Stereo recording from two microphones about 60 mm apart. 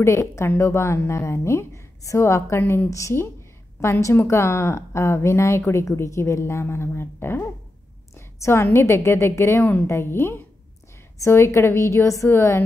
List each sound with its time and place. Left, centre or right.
0.0 s a woman's voice: left
2.9 s a woman's voice: left
3.8 s a woman's voice: left
11.1 s a woman's voice: left
12.3 s a woman's voice: left